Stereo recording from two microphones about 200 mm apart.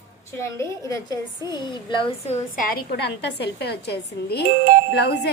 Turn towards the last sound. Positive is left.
turn(degrees=55)  # may be behind; listen again after turning